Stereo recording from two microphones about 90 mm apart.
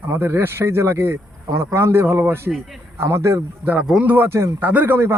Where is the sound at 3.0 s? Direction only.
30° right (ahead or behind).